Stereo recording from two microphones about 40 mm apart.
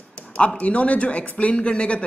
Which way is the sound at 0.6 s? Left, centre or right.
Left.